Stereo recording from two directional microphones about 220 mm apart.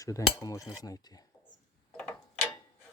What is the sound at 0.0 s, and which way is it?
Speech, 15° left (ahead or behind).